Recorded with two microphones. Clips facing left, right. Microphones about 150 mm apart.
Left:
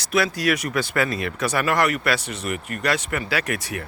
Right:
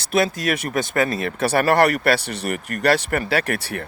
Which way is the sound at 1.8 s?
60° right (ahead or behind).